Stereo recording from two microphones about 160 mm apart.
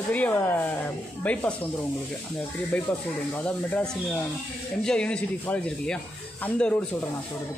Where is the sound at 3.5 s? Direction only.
10° left (ahead or behind).